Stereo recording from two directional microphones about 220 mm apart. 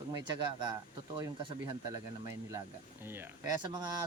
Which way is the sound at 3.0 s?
10° right (ahead or behind).